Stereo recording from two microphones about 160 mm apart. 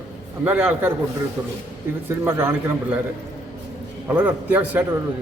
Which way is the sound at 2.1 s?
15° right (ahead or behind).